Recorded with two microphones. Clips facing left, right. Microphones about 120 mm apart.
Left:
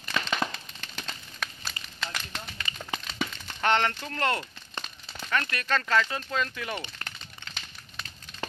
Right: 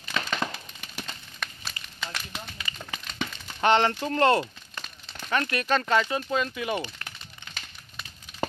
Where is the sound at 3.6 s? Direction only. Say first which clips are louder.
Right 4 dB; 25° right (ahead or behind).